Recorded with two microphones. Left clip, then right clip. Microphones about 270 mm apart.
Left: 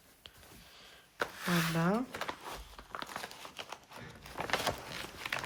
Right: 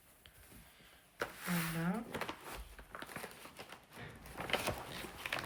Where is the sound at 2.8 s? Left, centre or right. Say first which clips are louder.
Left 5 dB; centre.